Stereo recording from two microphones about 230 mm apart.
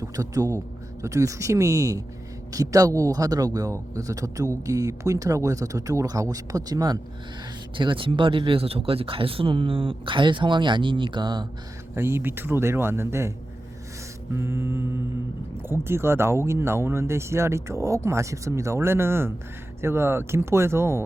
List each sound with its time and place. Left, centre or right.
0.0 s a man's voice: centre
14.3 s speech: centre